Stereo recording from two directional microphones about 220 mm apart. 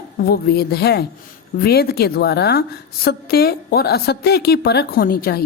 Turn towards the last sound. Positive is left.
turn(degrees=45)  # may be behind; listen again after turning